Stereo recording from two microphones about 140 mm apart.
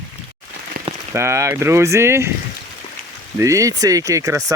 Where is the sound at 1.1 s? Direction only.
20° right (ahead or behind).